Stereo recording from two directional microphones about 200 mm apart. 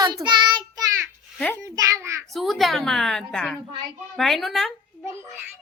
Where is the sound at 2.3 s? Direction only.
Centre (ahead or behind).